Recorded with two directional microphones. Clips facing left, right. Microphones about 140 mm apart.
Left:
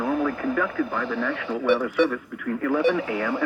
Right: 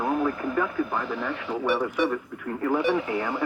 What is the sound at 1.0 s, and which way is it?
Speech, 85° left.